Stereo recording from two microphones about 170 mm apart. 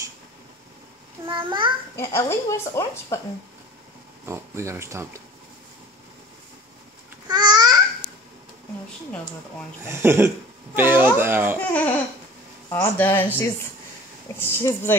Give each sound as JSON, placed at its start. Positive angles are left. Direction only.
{"t": 1.2, "sound": "a child's voice", "side_deg": -30}
{"t": 2.0, "sound": "speech", "side_deg": 15}
{"t": 4.3, "sound": "speech", "side_deg": -15}
{"t": 7.2, "sound": "babbling", "side_deg": -25}
{"t": 9.8, "sound": "speech", "side_deg": -15}
{"t": 11.6, "sound": "speech", "side_deg": 10}